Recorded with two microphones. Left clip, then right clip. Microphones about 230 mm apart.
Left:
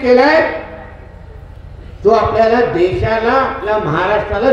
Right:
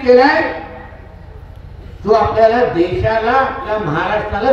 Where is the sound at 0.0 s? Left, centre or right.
Left.